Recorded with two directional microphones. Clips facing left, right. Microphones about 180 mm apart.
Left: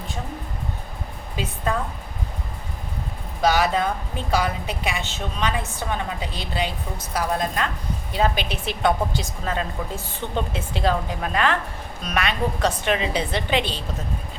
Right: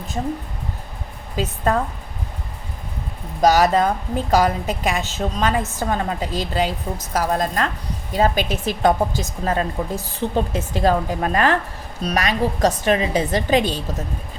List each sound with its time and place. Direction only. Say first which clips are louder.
3.4 s a woman's voice: right 5 dB; 40° right (ahead or behind)